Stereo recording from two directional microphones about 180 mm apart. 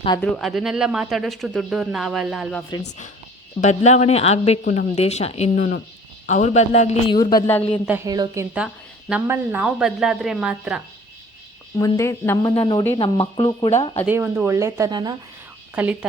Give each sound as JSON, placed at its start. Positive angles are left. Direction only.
{"t": 0.2, "sound": "speech", "side_deg": 5}
{"t": 3.6, "sound": "speech", "side_deg": 40}
{"t": 7.1, "sound": "a woman's voice", "side_deg": 25}
{"t": 7.9, "sound": "speech", "side_deg": -15}
{"t": 8.5, "sound": "speech", "side_deg": -5}
{"t": 11.8, "sound": "speech", "side_deg": 15}
{"t": 12.5, "sound": "a woman's voice", "side_deg": 25}
{"t": 14.1, "sound": "speech", "side_deg": -10}
{"t": 15.7, "sound": "speech", "side_deg": -5}